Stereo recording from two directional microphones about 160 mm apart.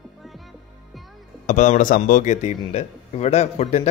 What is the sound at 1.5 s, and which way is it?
Speech, 50° left (ahead or behind).